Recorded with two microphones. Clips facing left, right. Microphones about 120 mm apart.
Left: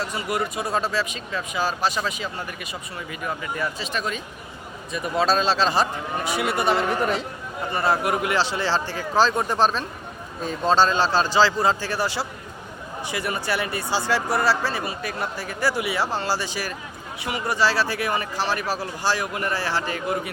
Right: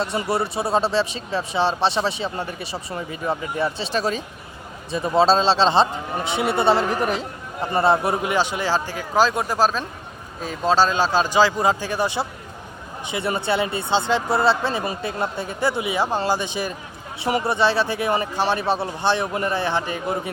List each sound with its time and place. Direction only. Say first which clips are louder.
0.0 s a man's voice: right 3 dB; 30° right (ahead or behind)
17.2 s speech: right 6 dB; 35° right (ahead or behind)
17.5 s speech: left 1 dB; 20° right (ahead or behind)